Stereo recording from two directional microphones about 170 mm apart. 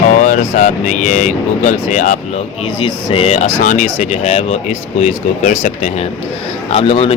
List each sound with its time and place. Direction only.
0.1 s speech: 50° left (ahead or behind)
3.1 s speech: 35° left (ahead or behind)
3.6 s speech: 45° left (ahead or behind)